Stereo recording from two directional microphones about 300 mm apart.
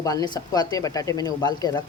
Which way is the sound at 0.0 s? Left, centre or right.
Centre.